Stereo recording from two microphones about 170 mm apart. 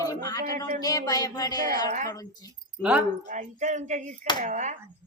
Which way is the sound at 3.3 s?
45° right (ahead or behind).